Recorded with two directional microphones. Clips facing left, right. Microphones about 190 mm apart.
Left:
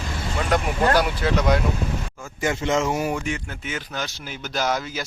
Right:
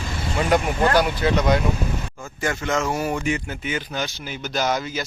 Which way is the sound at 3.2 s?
5° right (ahead or behind).